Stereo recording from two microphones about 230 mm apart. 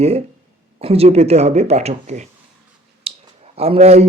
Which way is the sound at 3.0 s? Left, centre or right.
Right.